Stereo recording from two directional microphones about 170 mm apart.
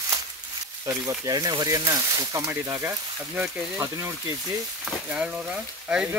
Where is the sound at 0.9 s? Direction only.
15° right (ahead or behind).